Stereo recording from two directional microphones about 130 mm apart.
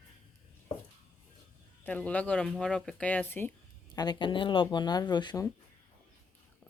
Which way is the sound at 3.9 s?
35° left (ahead or behind).